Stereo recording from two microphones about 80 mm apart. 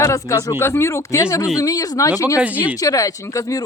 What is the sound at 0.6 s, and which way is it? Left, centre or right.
Speech, left.